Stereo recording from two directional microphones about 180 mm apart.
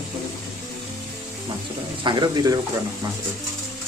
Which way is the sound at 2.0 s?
25° right (ahead or behind).